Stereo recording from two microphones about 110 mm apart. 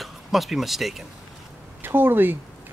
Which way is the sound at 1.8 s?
20° right (ahead or behind).